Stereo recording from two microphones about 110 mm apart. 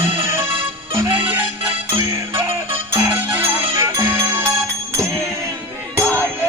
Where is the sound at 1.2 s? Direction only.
15° right (ahead or behind).